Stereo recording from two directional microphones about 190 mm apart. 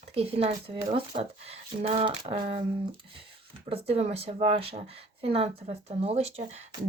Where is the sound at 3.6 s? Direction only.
30° right (ahead or behind).